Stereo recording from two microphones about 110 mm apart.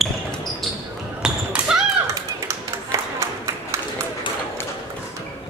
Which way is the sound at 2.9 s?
30° right (ahead or behind).